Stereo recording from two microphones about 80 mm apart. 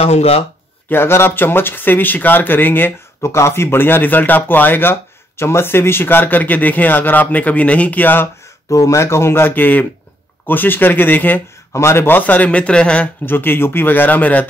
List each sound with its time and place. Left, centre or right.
0.8 s speech: left
8.6 s speech: left
11.7 s speech: left; by 13.1 s centre
13.2 s speech: left